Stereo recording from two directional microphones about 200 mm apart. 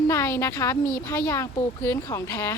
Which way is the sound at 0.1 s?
15° left (ahead or behind).